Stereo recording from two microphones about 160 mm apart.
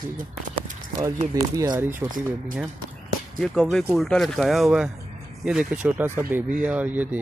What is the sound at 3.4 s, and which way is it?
Speech, 5° left (ahead or behind).